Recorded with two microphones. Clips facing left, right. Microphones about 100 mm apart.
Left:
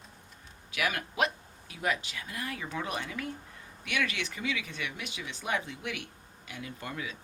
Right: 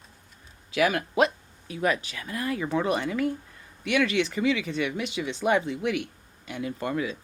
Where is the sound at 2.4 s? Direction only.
45° right (ahead or behind).